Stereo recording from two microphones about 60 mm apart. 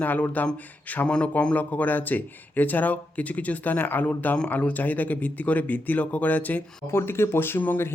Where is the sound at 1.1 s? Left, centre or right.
Centre.